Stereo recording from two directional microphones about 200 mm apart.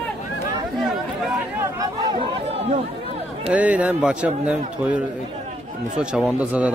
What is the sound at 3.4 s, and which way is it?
A man's voice, 5° right (ahead or behind).